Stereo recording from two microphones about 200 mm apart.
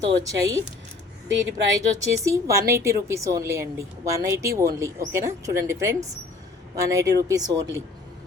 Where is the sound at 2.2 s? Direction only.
15° right (ahead or behind).